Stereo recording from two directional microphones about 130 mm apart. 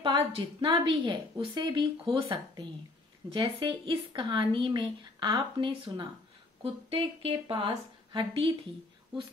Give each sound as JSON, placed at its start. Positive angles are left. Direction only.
{"t": 0.0, "sound": "a woman's voice", "side_deg": -40}